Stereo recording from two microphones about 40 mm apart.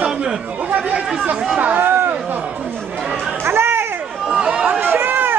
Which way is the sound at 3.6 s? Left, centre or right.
Right.